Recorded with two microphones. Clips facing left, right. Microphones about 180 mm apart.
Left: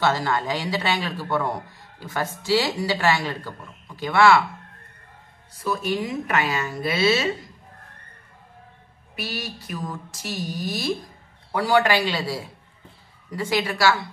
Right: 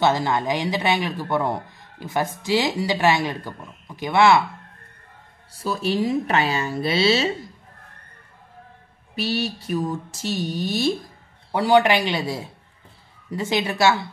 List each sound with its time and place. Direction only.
0.0 s a man's voice: 20° right (ahead or behind)
5.6 s speech: 30° right (ahead or behind)
9.1 s a man's voice: 30° right (ahead or behind)